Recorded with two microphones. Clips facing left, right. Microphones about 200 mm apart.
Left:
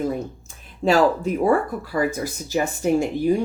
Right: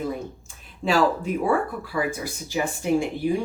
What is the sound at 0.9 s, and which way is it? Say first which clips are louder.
Speech: left 4 dB; 40° left (ahead or behind).